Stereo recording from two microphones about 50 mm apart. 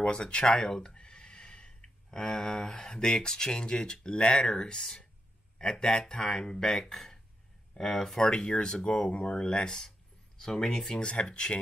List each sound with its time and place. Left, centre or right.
0.0 s speech: left